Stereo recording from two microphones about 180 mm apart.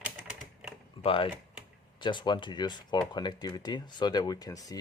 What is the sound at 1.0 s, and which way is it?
Speech, 30° left (ahead or behind).